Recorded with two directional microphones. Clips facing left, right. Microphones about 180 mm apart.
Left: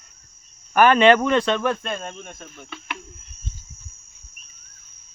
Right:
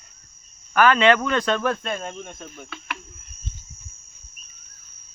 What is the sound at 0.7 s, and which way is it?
Speech, 20° left (ahead or behind).